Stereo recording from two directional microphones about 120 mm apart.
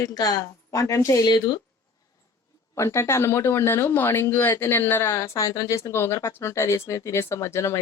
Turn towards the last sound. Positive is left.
turn(degrees=25)  # may be behind; listen again after turning